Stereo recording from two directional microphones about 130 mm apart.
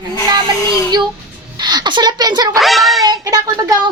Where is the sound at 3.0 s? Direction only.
30° right (ahead or behind).